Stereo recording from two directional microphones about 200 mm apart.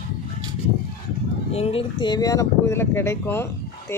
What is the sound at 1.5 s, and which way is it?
Speech, 30° left (ahead or behind).